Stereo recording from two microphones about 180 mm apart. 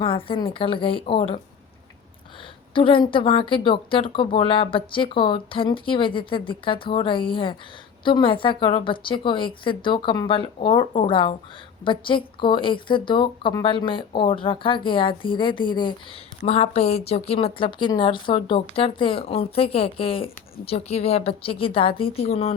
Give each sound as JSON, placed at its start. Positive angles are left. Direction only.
{"t": 0.0, "sound": "speech", "side_deg": 30}
{"t": 2.7, "sound": "speech", "side_deg": 30}